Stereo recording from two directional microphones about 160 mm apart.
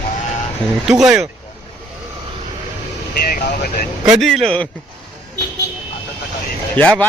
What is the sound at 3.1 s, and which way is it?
Speech, 70° left (ahead or behind).